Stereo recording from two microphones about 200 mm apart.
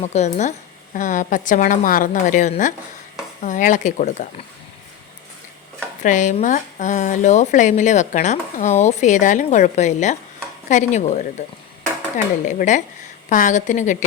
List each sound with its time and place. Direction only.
0.0 s speech: 35° left (ahead or behind)
6.0 s speech: 40° left (ahead or behind)